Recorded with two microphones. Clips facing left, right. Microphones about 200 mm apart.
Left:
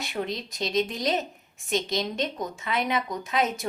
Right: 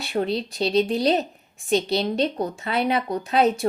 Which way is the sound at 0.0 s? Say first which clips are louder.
Right 7 dB; 35° right (ahead or behind).